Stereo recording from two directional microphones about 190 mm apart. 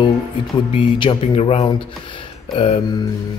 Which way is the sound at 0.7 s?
25° left (ahead or behind).